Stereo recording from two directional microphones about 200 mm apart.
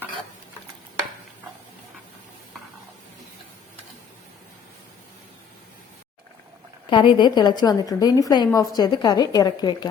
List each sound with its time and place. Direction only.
6.9 s a woman's voice: 25° left (ahead or behind)